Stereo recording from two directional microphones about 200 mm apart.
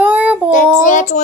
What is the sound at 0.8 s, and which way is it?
Speech, 40° left (ahead or behind).